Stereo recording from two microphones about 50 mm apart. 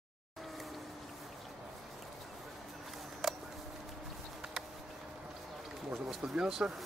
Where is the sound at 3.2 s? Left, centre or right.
Centre.